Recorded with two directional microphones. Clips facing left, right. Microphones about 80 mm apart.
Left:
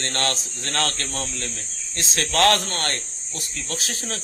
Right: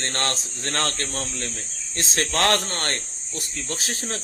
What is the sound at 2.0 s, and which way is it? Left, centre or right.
Speech, right.